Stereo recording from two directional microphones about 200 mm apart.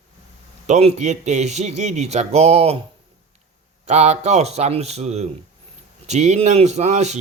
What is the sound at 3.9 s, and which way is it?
Speech, 35° right (ahead or behind).